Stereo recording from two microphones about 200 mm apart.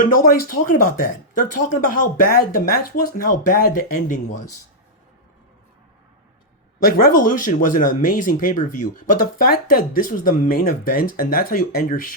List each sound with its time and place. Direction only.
0.0 s speech: 45° left (ahead or behind)
6.9 s speech: 45° left (ahead or behind)